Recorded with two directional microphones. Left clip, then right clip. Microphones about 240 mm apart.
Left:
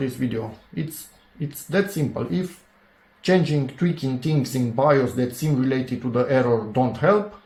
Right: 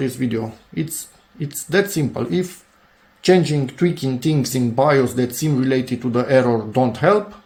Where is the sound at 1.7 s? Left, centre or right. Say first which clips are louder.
Right 5 dB; right.